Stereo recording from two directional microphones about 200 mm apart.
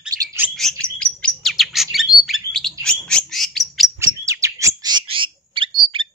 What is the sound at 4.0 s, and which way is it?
Bird, 15° right (ahead or behind).